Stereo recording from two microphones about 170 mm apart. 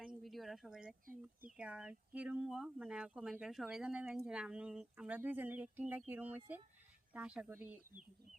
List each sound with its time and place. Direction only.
0.0 s a sound: centre (ahead or behind)
1.0 s speech: 55° right (ahead or behind)
1.5 s speech: 5° right (ahead or behind)